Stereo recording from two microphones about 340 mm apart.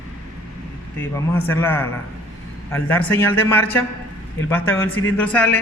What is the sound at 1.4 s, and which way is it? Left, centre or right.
A man's voice, centre.